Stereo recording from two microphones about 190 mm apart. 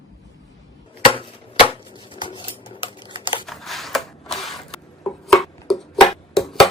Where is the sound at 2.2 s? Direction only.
25° left (ahead or behind).